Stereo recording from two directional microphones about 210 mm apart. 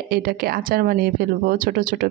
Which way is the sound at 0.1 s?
45° right (ahead or behind).